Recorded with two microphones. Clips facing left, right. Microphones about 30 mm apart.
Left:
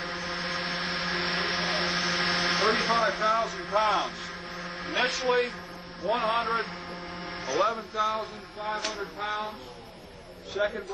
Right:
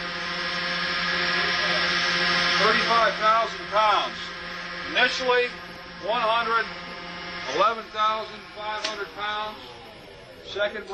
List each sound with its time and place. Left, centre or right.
0.0 s a sound: right
6.0 s speech: right
10.5 s speech: right